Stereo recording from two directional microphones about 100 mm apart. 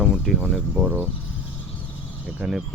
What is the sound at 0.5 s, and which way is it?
Speech, 15° right (ahead or behind).